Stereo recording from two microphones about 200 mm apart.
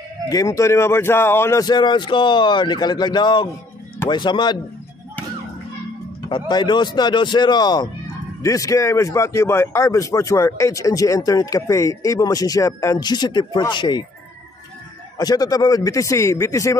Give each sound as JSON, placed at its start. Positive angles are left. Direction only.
{"t": 0.3, "sound": "speech", "side_deg": 15}
{"t": 6.5, "sound": "a man's voice", "side_deg": 20}
{"t": 15.1, "sound": "a man's voice", "side_deg": 20}